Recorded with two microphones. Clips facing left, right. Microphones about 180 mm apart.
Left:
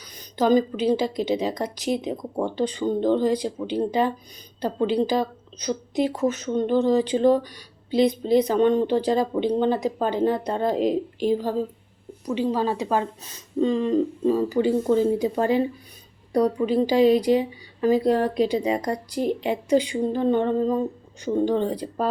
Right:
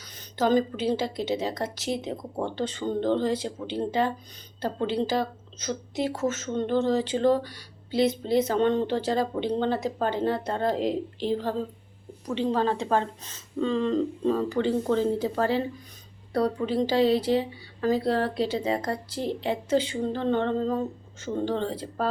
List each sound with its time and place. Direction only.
0.3 s speech: 15° left (ahead or behind)